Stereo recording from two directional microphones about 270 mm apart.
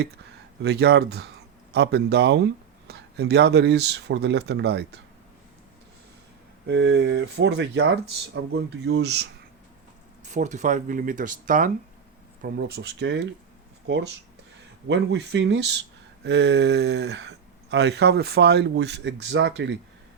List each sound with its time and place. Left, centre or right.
0.6 s speech: right
6.7 s speech: right
10.2 s speech: right